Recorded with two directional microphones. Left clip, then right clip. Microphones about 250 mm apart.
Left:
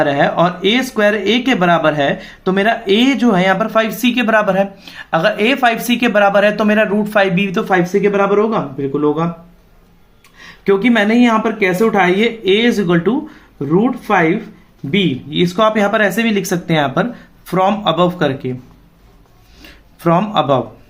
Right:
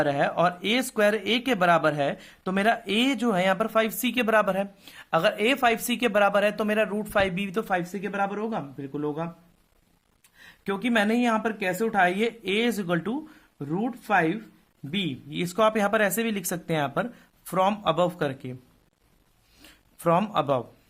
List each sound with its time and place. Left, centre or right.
0.0 s speech: right
10.6 s speech: right
19.6 s a sound: right